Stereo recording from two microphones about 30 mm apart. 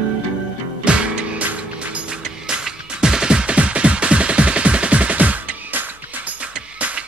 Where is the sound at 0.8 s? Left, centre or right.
Right.